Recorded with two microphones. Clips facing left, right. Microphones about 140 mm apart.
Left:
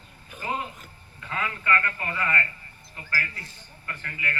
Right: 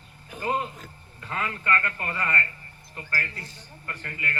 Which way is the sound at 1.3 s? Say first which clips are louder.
Even; 35° right (ahead or behind).